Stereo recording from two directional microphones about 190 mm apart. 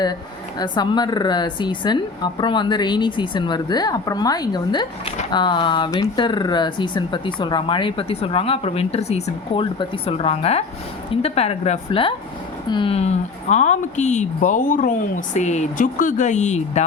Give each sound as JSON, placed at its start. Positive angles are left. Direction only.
{"t": 0.6, "sound": "a woman's voice", "side_deg": 25}